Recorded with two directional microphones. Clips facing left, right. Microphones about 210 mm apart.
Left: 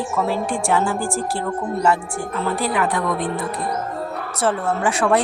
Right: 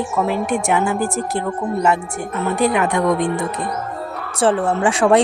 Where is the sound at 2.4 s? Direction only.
20° right (ahead or behind).